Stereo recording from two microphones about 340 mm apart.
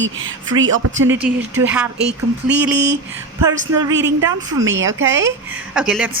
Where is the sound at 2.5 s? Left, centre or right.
Right.